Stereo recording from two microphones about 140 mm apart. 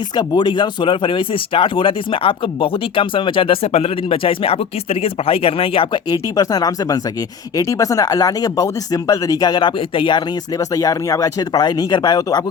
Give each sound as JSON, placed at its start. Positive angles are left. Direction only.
{"t": 0.2, "sound": "speech", "side_deg": 35}